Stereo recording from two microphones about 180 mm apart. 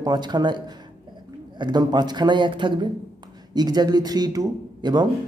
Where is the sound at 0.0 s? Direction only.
25° right (ahead or behind).